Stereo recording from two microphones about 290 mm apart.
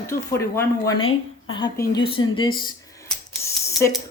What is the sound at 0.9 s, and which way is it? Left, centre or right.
Speech, left.